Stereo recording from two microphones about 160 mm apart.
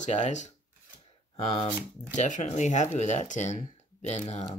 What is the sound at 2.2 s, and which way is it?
Speech, 50° left (ahead or behind).